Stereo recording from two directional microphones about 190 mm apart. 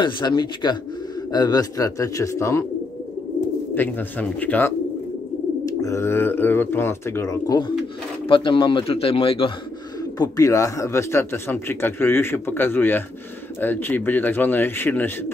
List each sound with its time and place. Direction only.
0.0 s speech: 20° left (ahead or behind)
3.7 s speech: 10° left (ahead or behind)
5.8 s speech: 15° left (ahead or behind)